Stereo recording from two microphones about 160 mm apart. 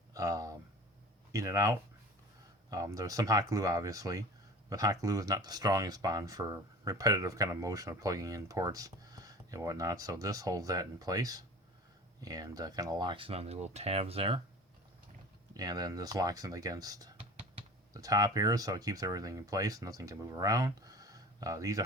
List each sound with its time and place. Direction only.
0.1 s a sound: 20° right (ahead or behind)
1.3 s speech: 20° right (ahead or behind); by 14.4 s 35° right (ahead or behind)
15.5 s speech: 25° right (ahead or behind)